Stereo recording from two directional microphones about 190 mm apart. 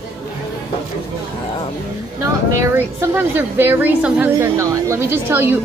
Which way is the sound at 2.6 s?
10° right (ahead or behind).